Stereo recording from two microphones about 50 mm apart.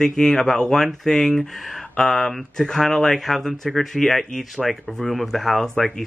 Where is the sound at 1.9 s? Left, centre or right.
Centre.